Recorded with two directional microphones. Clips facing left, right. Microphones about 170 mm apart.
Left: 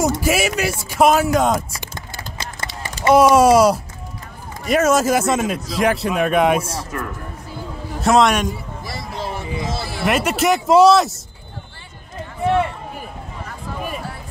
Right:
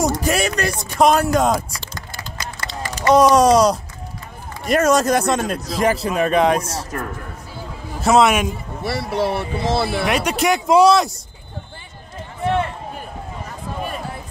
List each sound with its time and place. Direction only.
0.0 s a man's voice: 5° left (ahead or behind)
2.0 s a sound: 25° left (ahead or behind)
3.1 s a man's voice: 5° left (ahead or behind)
8.0 s a man's voice: 5° right (ahead or behind)
8.8 s speech: 70° right (ahead or behind)
10.0 s a man's voice: centre (ahead or behind)